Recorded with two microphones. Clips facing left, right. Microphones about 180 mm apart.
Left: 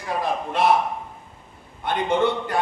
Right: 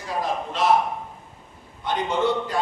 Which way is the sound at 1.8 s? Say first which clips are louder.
Left 2 dB; 55° left (ahead or behind).